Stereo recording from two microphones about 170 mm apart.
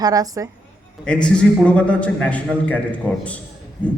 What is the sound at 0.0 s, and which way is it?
Speech, 20° right (ahead or behind).